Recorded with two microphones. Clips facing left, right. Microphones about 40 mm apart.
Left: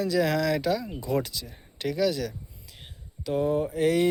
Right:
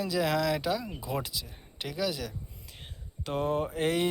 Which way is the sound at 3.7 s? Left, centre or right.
Right.